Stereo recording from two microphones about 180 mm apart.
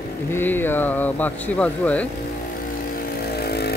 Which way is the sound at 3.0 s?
60° left (ahead or behind).